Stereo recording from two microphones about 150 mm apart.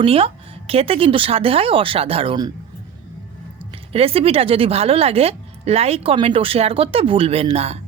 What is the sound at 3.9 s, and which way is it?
Speech, 40° right (ahead or behind).